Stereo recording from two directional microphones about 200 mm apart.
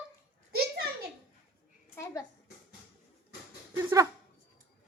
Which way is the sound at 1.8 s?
15° left (ahead or behind).